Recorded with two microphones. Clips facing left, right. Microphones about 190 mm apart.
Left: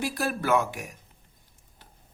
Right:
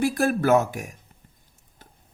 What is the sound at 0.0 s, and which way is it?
Speech, 50° right (ahead or behind).